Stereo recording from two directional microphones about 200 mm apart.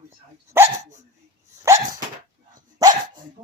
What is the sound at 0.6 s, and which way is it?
Speech, 35° right (ahead or behind).